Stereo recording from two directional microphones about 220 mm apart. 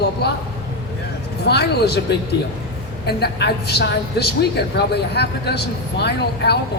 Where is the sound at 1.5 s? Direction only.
50° left (ahead or behind).